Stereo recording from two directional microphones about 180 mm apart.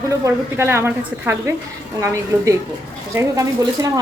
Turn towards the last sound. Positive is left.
turn(degrees=-15)  # may be behind; listen again after turning